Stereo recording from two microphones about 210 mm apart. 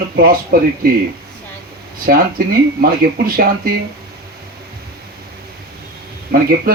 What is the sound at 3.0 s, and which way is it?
Speech, 45° right (ahead or behind).